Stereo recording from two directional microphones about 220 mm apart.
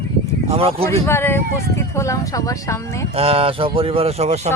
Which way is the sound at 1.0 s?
10° left (ahead or behind).